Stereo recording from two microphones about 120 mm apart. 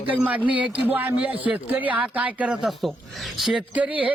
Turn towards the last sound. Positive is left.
turn(degrees=-10)  # may be behind; listen again after turning